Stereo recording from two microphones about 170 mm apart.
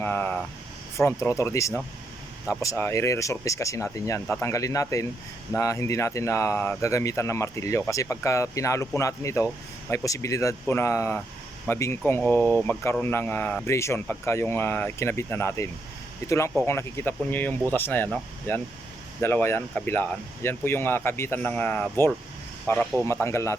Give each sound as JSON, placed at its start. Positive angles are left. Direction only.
{"t": 0.0, "sound": "a sound", "side_deg": 10}
{"t": 0.9, "sound": "speech", "side_deg": 15}
{"t": 23.0, "sound": "speech", "side_deg": 15}